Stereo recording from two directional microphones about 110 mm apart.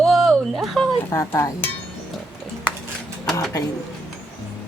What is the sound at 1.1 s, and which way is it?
Speech, 25° left (ahead or behind).